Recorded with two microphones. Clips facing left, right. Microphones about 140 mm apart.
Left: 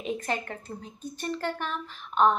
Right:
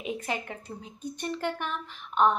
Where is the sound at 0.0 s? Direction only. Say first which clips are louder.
Left 2 dB; 10° right (ahead or behind).